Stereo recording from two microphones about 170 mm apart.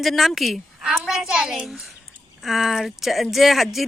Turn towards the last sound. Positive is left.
turn(degrees=0)  # may be behind; listen again after turning